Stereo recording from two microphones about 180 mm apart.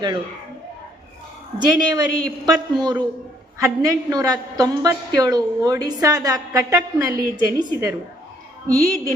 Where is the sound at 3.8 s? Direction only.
20° right (ahead or behind).